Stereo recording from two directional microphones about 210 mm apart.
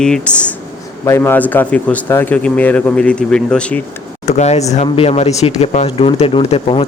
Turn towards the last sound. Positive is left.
turn(degrees=25)  # may be behind; listen again after turning